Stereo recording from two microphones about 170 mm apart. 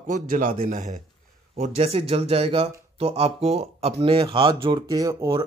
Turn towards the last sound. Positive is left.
turn(degrees=-20)  # may be behind; listen again after turning